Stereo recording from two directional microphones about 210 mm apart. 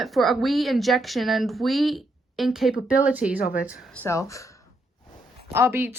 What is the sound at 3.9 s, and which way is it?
Speech, 10° left (ahead or behind).